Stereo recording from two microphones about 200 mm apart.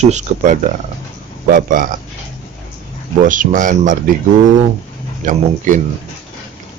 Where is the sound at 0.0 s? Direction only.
35° right (ahead or behind).